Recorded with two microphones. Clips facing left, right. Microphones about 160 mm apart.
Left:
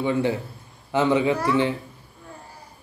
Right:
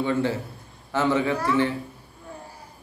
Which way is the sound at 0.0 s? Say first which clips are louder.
Left 1 dB; 15° left (ahead or behind).